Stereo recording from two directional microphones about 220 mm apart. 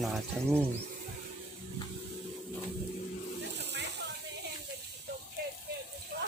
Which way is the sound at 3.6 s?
50° right (ahead or behind).